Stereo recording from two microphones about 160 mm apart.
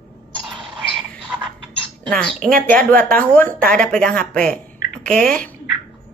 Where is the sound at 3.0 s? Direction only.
60° right (ahead or behind).